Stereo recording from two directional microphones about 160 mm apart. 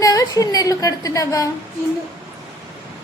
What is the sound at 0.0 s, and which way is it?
A woman's voice, 20° left (ahead or behind).